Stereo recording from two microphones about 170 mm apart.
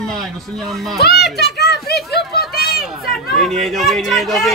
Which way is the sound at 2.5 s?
65° left (ahead or behind).